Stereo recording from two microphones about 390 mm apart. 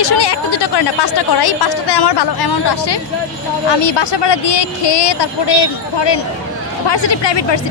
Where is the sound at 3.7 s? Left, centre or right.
Left.